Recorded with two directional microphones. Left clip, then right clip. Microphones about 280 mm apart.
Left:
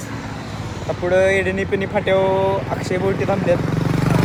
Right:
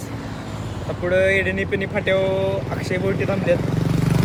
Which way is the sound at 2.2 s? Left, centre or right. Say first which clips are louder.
Left 5 dB; centre.